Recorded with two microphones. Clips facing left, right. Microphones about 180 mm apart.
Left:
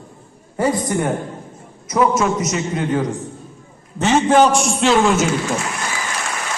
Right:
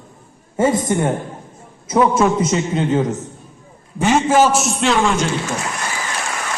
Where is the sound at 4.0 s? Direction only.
5° right (ahead or behind).